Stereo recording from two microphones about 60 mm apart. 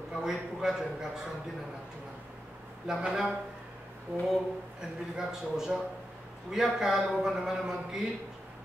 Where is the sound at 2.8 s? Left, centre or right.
Centre.